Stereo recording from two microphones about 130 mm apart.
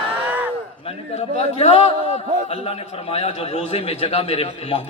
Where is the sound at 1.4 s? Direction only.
55° left (ahead or behind).